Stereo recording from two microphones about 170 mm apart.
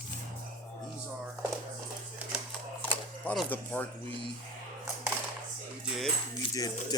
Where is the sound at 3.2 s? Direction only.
5° left (ahead or behind).